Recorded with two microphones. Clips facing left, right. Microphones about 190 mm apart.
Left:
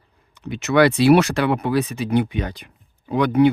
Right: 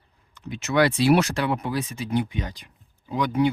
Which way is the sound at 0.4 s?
70° left (ahead or behind).